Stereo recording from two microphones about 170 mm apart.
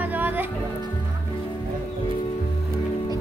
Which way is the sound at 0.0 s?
10° right (ahead or behind).